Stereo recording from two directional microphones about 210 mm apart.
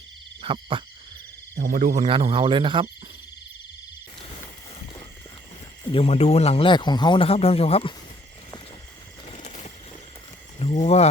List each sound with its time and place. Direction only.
0.4 s speech: 25° right (ahead or behind)
1.5 s speech: 45° right (ahead or behind)
2.0 s speech: 25° right (ahead or behind)
5.8 s speech: 25° left (ahead or behind)
9.3 s a sound: 30° left (ahead or behind)
10.6 s speech: 30° left (ahead or behind)